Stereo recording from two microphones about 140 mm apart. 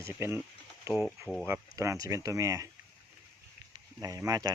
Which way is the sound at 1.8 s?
20° right (ahead or behind).